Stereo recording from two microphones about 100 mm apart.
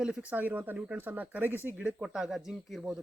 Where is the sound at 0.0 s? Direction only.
10° right (ahead or behind).